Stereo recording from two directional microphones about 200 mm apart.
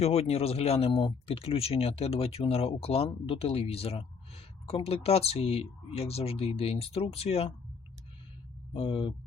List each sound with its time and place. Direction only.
0.0 s speech: 30° left (ahead or behind)
8.7 s speech: 25° left (ahead or behind)